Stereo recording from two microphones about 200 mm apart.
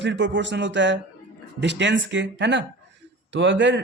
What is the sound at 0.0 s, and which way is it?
A man's voice, 65° right (ahead or behind).